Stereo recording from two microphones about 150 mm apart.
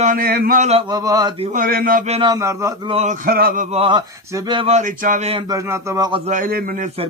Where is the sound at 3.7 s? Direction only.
35° right (ahead or behind).